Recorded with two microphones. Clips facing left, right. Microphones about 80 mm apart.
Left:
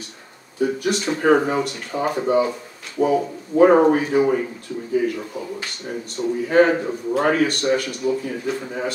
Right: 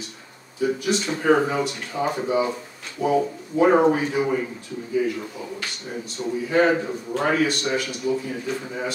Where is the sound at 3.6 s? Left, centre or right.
Left.